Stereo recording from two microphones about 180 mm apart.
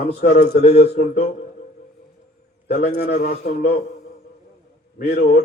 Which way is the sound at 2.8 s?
60° left (ahead or behind).